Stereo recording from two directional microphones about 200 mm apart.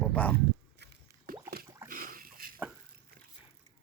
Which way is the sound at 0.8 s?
55° right (ahead or behind).